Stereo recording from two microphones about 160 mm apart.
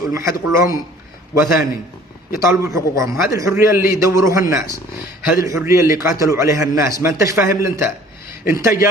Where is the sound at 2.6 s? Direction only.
20° right (ahead or behind).